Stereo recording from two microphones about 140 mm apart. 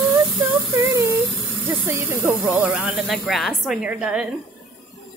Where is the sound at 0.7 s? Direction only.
25° right (ahead or behind).